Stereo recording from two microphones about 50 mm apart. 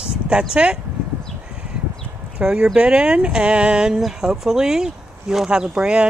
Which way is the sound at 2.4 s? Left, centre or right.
Centre.